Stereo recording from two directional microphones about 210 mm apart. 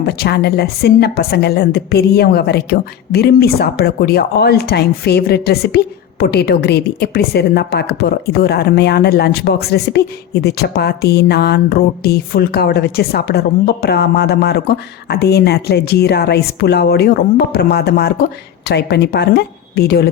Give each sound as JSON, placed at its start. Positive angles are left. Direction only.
{"t": 0.0, "sound": "a woman's voice", "side_deg": 50}